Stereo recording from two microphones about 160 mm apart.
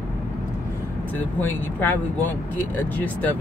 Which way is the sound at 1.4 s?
10° left (ahead or behind).